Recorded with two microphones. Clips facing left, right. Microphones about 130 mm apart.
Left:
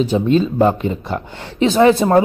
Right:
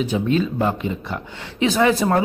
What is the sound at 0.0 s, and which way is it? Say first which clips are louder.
Speech: left 5 dB; 30° left (ahead or behind).